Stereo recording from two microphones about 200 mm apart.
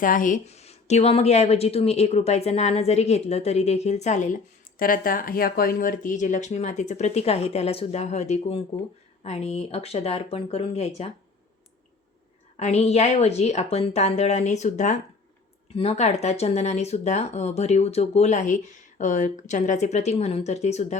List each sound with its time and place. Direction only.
0.0 s speech: 40° left (ahead or behind)
12.5 s speech: 30° left (ahead or behind)